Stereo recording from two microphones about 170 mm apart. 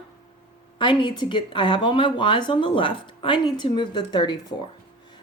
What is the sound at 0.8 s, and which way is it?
Speech, 30° left (ahead or behind).